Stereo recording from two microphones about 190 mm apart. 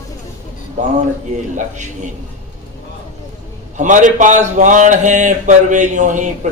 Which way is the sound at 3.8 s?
40° right (ahead or behind).